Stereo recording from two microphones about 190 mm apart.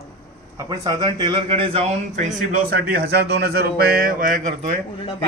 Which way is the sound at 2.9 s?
55° right (ahead or behind).